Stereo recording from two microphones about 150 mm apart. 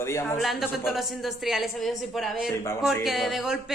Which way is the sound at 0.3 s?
Centre (ahead or behind).